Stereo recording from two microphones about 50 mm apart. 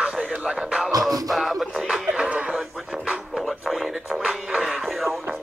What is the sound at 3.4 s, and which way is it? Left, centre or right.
Music, centre.